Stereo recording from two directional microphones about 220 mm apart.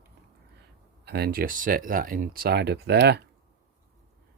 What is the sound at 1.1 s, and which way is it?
Speech, 45° right (ahead or behind).